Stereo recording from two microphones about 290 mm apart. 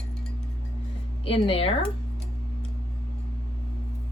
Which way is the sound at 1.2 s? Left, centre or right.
Centre.